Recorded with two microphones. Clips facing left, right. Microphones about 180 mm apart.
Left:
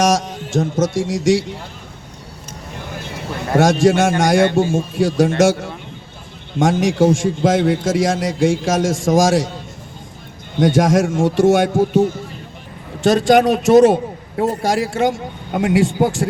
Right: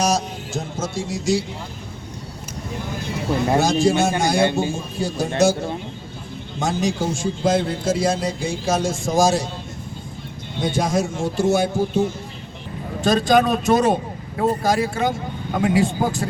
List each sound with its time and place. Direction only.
0.0 s music: 90° left
3.6 s a man's voice: 90° left
6.6 s a man's voice: 90° left
10.6 s a man's voice: 90° left
13.0 s a man's voice: 75° left (ahead or behind)